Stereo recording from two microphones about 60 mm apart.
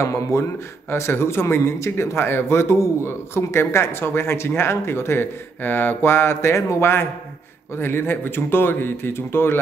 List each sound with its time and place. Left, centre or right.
0.0 s speech: left